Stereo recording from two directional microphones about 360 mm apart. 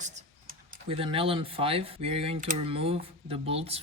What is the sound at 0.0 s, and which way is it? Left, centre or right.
Speech, right.